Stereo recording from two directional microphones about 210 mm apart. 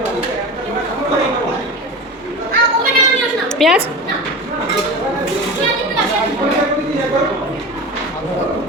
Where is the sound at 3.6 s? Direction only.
Centre (ahead or behind).